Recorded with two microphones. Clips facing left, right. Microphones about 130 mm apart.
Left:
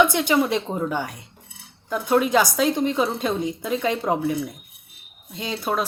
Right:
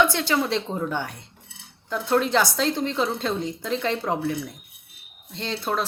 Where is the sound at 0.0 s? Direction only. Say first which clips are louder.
Left 3 dB; 15° left (ahead or behind).